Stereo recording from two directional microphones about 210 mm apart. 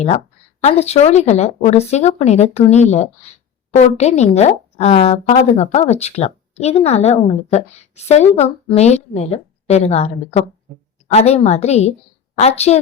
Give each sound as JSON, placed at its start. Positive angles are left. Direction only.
{"t": 0.6, "sound": "a woman's voice", "side_deg": 30}